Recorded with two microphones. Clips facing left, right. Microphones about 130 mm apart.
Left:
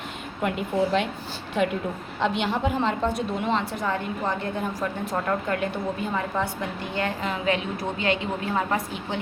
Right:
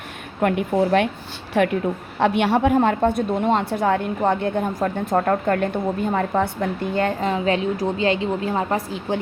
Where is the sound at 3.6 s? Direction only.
60° right (ahead or behind).